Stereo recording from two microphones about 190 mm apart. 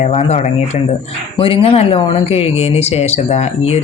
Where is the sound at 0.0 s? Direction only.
35° left (ahead or behind).